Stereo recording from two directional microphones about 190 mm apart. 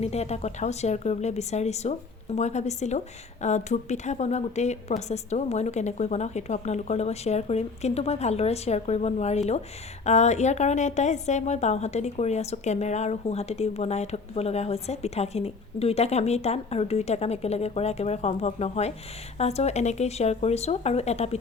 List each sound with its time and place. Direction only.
0.0 s a woman's voice: 35° left (ahead or behind)